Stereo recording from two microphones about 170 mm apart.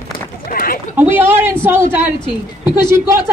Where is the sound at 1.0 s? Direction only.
15° right (ahead or behind).